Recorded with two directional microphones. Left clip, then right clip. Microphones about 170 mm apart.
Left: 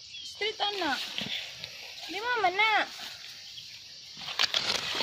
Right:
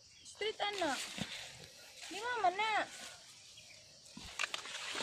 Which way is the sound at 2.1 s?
50° left (ahead or behind).